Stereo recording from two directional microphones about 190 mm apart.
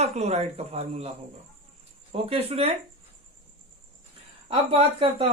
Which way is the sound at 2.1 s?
30° right (ahead or behind).